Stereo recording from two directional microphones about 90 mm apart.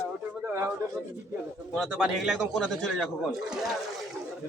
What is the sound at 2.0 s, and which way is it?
A man's voice, 5° right (ahead or behind).